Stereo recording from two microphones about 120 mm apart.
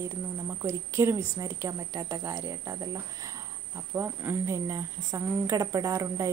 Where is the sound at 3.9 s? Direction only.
20° right (ahead or behind).